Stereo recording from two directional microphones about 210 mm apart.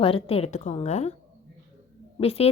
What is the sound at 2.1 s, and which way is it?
Speech, 30° left (ahead or behind).